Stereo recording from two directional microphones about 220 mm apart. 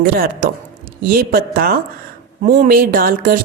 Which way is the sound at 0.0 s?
40° right (ahead or behind).